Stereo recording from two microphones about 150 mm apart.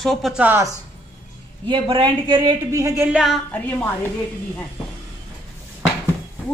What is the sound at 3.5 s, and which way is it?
Speech, 10° left (ahead or behind).